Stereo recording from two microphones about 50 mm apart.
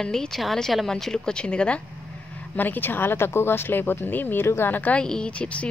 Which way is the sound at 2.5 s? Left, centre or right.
Left.